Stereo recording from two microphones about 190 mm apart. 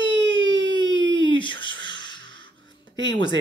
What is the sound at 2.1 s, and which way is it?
Music, 80° right.